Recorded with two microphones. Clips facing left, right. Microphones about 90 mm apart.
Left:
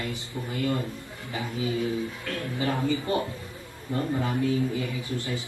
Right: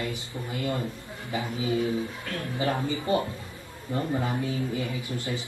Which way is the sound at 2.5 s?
20° right (ahead or behind).